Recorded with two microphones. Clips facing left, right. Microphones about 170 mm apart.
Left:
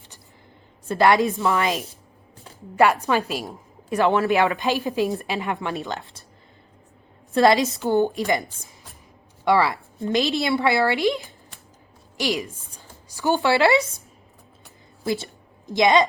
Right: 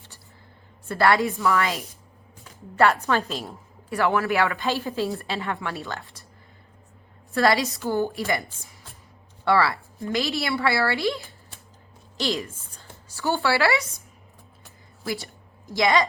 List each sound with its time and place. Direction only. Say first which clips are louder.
0.9 s a woman's voice: left 3 dB; 20° left (ahead or behind)
7.3 s a woman's voice: left 4 dB; 20° left (ahead or behind)
15.0 s a sound: left 5 dB; 25° left (ahead or behind)